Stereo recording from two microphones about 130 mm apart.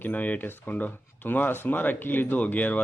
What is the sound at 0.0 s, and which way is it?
Speech, 10° left (ahead or behind).